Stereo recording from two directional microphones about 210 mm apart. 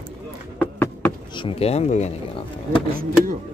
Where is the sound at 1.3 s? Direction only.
25° left (ahead or behind).